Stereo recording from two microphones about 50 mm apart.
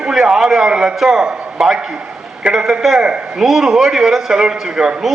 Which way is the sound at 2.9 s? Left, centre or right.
Centre.